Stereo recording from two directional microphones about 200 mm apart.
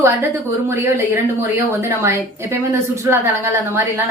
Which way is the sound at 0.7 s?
10° right (ahead or behind).